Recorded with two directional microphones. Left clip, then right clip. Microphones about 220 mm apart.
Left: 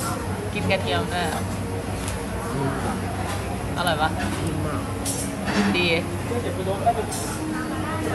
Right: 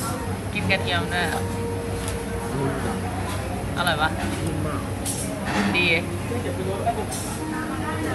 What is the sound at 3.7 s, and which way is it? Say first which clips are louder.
Speech: even; 15° left (ahead or behind).